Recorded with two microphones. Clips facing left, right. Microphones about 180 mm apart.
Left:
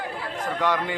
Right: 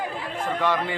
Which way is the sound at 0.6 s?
15° left (ahead or behind).